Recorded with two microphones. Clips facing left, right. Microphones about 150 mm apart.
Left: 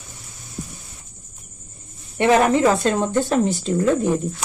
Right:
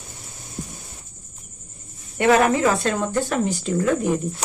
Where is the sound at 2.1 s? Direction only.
25° left (ahead or behind).